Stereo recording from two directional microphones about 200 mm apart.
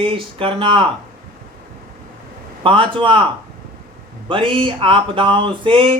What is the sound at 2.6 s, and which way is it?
Speech, 25° right (ahead or behind).